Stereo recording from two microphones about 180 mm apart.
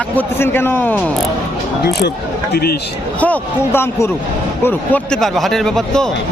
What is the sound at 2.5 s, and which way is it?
Speech, 60° left (ahead or behind).